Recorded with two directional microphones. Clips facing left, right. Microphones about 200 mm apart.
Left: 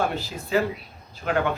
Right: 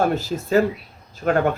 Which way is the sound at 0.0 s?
45° right (ahead or behind).